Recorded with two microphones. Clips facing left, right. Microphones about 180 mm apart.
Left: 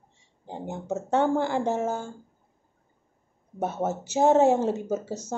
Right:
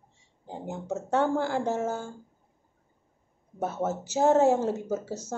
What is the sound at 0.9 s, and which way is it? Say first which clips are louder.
Speech: left 2 dB; 5° right (ahead or behind).